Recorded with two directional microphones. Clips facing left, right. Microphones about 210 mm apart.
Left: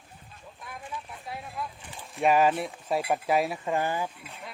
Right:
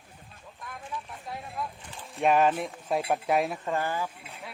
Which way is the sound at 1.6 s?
Centre (ahead or behind).